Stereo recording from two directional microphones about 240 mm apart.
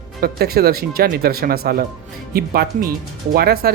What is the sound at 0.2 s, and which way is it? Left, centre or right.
Speech, right.